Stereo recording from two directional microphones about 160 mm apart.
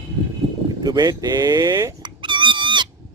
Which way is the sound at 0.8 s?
25° right (ahead or behind).